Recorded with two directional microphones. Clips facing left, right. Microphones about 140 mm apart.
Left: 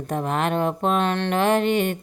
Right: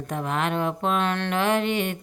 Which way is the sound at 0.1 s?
40° left (ahead or behind).